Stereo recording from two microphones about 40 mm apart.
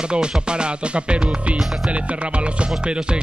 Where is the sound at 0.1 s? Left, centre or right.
Right.